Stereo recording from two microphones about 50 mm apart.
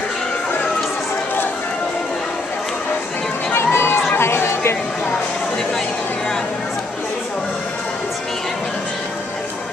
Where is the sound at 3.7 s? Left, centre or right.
Left.